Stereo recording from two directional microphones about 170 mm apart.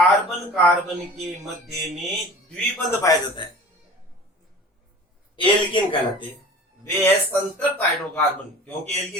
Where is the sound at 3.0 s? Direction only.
25° left (ahead or behind).